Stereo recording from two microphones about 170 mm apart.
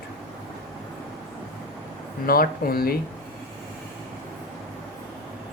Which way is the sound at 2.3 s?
60° left (ahead or behind).